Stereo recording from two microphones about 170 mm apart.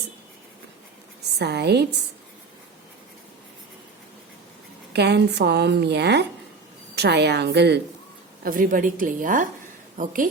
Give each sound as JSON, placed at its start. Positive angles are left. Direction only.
{"t": 1.4, "sound": "a woman's voice", "side_deg": -75}
{"t": 4.9, "sound": "a woman's voice", "side_deg": -80}
{"t": 8.4, "sound": "a woman's voice", "side_deg": -55}